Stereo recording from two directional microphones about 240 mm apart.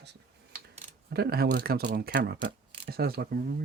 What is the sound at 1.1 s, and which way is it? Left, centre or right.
Speech, right.